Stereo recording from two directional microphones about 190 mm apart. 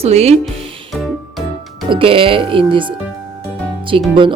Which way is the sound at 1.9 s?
30° right (ahead or behind).